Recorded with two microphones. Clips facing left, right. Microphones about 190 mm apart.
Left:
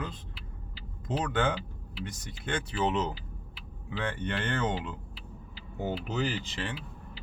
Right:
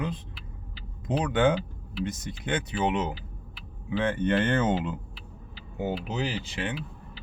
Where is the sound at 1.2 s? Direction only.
15° right (ahead or behind).